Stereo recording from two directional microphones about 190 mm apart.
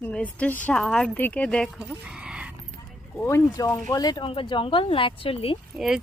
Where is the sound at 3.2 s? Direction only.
15° left (ahead or behind).